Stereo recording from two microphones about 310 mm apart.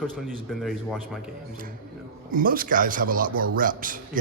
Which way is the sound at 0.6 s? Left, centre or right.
Centre.